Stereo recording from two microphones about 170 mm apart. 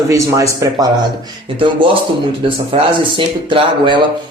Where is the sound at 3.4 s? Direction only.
30° right (ahead or behind).